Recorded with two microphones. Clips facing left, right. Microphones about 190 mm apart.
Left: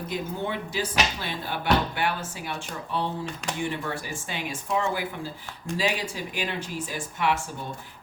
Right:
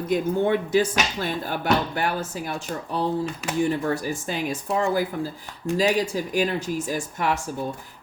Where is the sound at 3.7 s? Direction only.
40° right (ahead or behind).